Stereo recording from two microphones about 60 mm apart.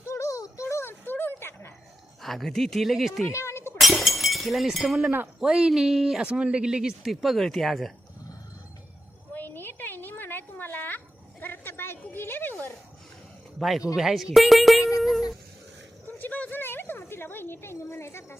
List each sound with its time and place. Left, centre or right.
0.0 s music: left
0.6 s a sound: left
2.2 s speech: centre
3.3 s chink: left
3.8 s breaking: centre
5.4 s speech: centre
9.3 s a sound: left
13.6 s speech: centre
16.0 s a sound: left